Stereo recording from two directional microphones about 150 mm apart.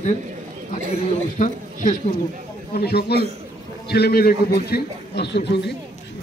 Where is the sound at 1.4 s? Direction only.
60° left (ahead or behind).